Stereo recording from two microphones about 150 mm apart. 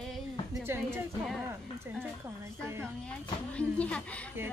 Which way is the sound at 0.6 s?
15° right (ahead or behind).